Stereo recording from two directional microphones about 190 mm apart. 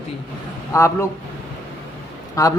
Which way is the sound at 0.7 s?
15° left (ahead or behind).